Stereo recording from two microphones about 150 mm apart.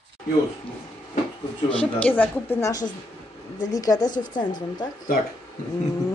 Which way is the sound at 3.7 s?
25° left (ahead or behind).